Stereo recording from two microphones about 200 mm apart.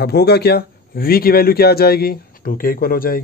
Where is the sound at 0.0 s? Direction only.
55° left (ahead or behind).